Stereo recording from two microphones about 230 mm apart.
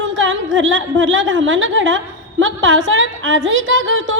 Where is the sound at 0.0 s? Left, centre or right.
Right.